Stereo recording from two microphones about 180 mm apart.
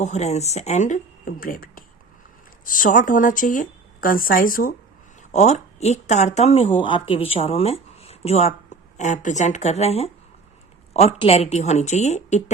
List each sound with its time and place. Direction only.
0.0 s speech: 40° left (ahead or behind)
5.3 s speech: 40° left (ahead or behind)